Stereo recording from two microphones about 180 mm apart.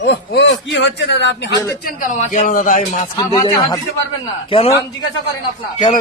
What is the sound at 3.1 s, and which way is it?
A man's voice, 25° left (ahead or behind).